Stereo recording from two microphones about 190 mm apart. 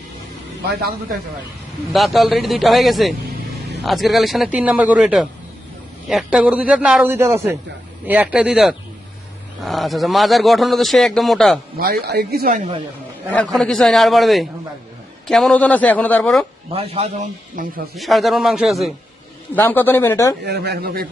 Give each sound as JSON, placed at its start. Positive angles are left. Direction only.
{"t": 0.7, "sound": "speech", "side_deg": -55}
{"t": 1.9, "sound": "a man's voice", "side_deg": 0}
{"t": 11.8, "sound": "speech", "side_deg": -55}
{"t": 13.3, "sound": "a man's voice", "side_deg": 5}
{"t": 16.7, "sound": "a man's voice", "side_deg": -35}
{"t": 17.6, "sound": "speech", "side_deg": -45}
{"t": 17.9, "sound": "a man's voice", "side_deg": 0}
{"t": 19.5, "sound": "a man's voice", "side_deg": 10}
{"t": 20.4, "sound": "speech", "side_deg": -60}